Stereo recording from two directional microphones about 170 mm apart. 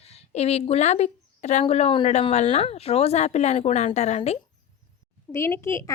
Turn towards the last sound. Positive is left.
turn(degrees=15)  # may be behind; listen again after turning